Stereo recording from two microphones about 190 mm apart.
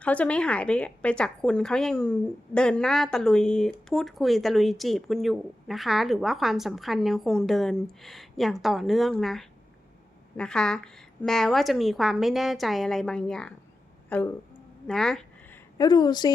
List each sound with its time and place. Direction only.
0.0 s a woman's voice: 5° left (ahead or behind)
14.1 s a sound: 10° left (ahead or behind)
15.8 s a woman's voice: 20° left (ahead or behind)